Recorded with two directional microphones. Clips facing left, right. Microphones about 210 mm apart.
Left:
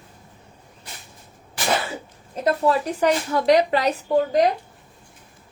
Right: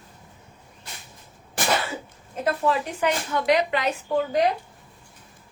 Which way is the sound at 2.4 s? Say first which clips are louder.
Left 4 dB; 35° left (ahead or behind).